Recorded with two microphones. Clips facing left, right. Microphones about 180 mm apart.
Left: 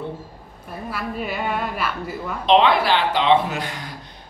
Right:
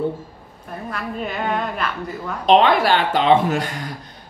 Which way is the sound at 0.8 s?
5° left (ahead or behind).